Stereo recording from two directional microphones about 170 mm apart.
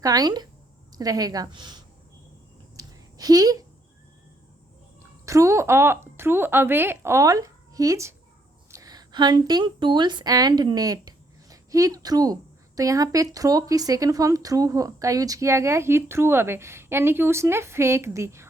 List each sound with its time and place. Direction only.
0.0 s a woman's voice: 20° right (ahead or behind)
2.7 s a sound: 20° right (ahead or behind)
5.2 s a woman's voice: 20° right (ahead or behind)